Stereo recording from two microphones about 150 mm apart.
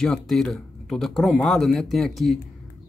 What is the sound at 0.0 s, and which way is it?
Speech, 5° left (ahead or behind).